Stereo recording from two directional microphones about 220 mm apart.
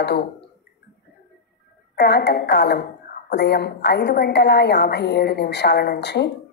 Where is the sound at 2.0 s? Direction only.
50° left (ahead or behind).